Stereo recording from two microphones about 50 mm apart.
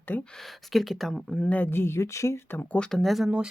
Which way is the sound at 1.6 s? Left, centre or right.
Left.